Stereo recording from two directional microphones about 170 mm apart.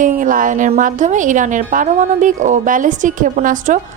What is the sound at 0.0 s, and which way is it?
Speech, 50° right (ahead or behind).